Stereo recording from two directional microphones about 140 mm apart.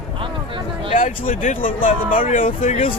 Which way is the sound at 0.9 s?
70° left (ahead or behind).